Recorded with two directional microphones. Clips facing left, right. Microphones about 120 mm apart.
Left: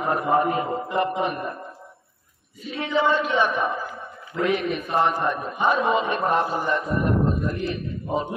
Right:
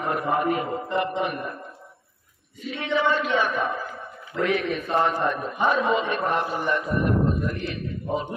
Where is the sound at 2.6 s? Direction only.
30° left (ahead or behind); by 5.8 s 10° left (ahead or behind).